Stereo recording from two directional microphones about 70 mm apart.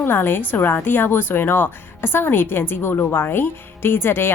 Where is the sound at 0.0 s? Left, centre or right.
Left.